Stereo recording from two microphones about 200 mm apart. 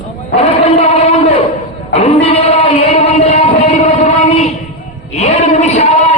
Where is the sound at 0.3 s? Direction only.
30° left (ahead or behind).